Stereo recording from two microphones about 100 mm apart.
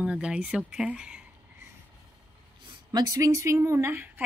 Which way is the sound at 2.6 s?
45° right (ahead or behind).